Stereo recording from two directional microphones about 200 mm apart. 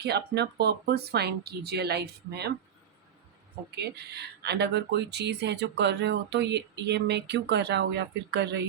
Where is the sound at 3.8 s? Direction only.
55° right (ahead or behind).